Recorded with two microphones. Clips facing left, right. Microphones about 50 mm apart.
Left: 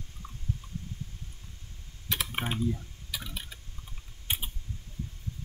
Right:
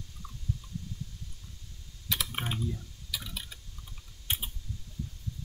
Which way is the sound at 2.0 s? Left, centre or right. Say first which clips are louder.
Left 2 dB; left.